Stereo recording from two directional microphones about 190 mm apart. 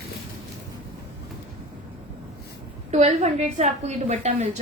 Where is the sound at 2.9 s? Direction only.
35° right (ahead or behind).